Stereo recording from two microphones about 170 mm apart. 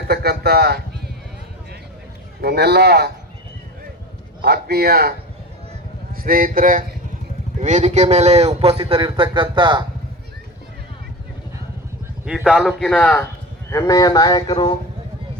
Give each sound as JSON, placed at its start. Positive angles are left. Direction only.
{"t": 0.1, "sound": "a man's voice", "side_deg": -70}
{"t": 2.4, "sound": "speech", "side_deg": -70}
{"t": 4.4, "sound": "a man's voice", "side_deg": -65}
{"t": 6.1, "sound": "a man's voice", "side_deg": -55}
{"t": 12.2, "sound": "a man's voice", "side_deg": -5}
{"t": 13.7, "sound": "speech", "side_deg": 20}